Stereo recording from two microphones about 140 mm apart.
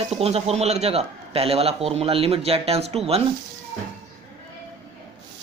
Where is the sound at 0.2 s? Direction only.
45° right (ahead or behind).